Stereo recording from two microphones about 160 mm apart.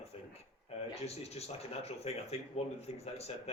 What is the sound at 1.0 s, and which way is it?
A man's voice, 40° left (ahead or behind).